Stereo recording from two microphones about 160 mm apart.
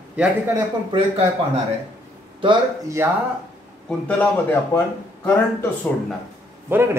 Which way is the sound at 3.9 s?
10° left (ahead or behind).